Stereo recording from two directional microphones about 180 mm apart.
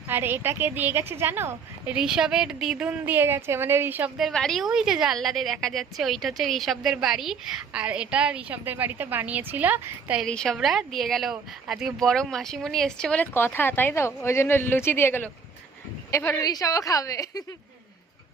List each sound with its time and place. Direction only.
0.1 s a woman's voice: 10° right (ahead or behind)
4.3 s a woman's voice: 5° left (ahead or behind)
10.2 s a woman's voice: 5° left (ahead or behind)